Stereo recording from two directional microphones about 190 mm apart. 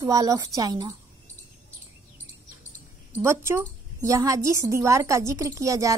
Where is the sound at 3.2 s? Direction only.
15° right (ahead or behind).